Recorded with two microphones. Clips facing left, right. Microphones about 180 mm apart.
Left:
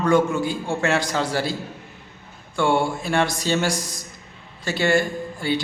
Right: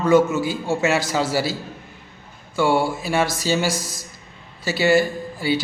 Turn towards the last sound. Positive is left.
turn(degrees=-5)  # may be behind; listen again after turning